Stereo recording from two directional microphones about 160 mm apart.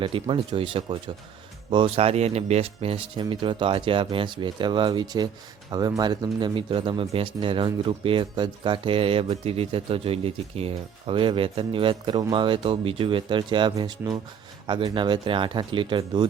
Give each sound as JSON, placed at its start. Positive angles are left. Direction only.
{"t": 0.0, "sound": "speech", "side_deg": -30}